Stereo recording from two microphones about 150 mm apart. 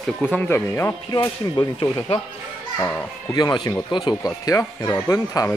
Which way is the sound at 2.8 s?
10° left (ahead or behind).